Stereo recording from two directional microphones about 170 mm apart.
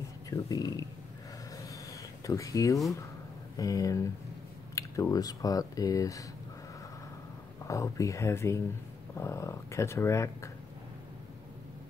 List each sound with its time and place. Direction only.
0.3 s speech: 20° left (ahead or behind)
2.2 s speech: 20° left (ahead or behind)
7.6 s speech: 20° left (ahead or behind)